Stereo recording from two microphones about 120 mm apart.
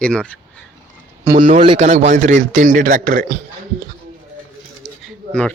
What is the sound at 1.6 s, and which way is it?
A man's voice, 60° right (ahead or behind).